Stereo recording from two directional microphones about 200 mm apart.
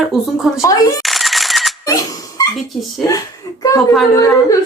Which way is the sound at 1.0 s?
Centre (ahead or behind).